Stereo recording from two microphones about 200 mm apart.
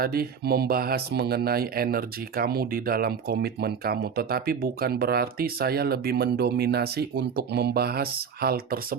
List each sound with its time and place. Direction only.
0.0 s speech: 50° right (ahead or behind)